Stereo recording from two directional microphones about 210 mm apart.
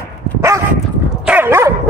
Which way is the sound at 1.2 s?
10° right (ahead or behind).